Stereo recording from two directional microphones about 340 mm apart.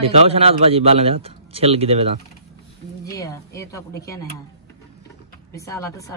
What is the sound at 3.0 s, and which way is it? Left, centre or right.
Speech, centre.